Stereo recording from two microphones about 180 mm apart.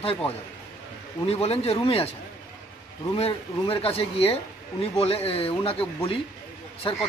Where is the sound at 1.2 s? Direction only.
35° left (ahead or behind).